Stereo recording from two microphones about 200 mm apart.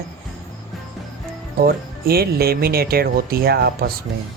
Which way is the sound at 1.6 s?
50° right (ahead or behind).